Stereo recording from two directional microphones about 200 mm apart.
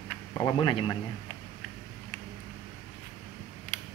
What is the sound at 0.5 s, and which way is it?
Speech, 25° left (ahead or behind).